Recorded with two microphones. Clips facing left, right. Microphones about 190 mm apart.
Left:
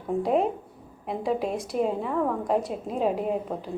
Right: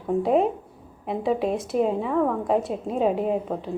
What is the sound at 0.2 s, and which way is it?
A woman's voice, centre (ahead or behind).